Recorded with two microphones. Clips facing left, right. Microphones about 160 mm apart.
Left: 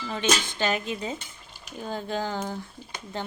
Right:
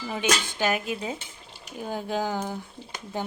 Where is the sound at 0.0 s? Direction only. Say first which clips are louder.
Right 1 dB; 10° right (ahead or behind).